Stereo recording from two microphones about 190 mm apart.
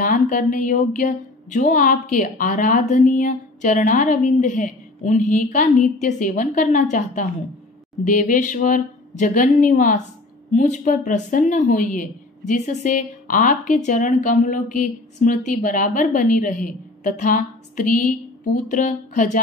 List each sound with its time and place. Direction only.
0.0 s a woman's voice: 45° left (ahead or behind)